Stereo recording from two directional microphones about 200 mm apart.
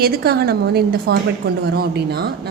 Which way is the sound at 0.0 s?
50° right (ahead or behind).